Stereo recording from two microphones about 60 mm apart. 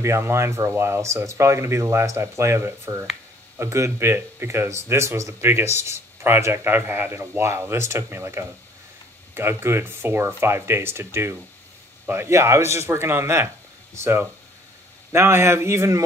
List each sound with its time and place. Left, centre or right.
0.0 s speech: right